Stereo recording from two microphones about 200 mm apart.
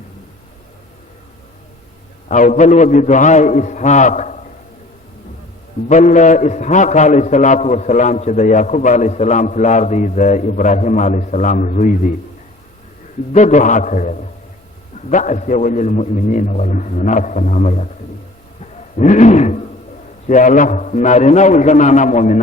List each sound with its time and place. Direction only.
2.3 s a man's voice: 40° left (ahead or behind)
5.9 s a man's voice: 40° left (ahead or behind)
13.3 s a man's voice: 35° left (ahead or behind)
18.9 s a sound: 35° left (ahead or behind)
20.2 s a man's voice: 40° left (ahead or behind)